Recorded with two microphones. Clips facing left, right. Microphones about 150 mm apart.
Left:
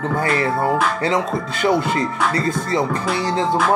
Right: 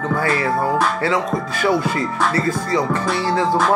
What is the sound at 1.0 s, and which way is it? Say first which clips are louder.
Speech: even; 20° left (ahead or behind).